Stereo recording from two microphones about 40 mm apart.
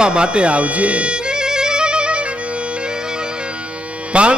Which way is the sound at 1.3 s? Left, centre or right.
Centre.